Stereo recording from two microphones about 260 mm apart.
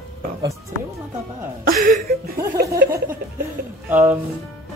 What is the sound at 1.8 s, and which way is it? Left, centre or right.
Speech, right.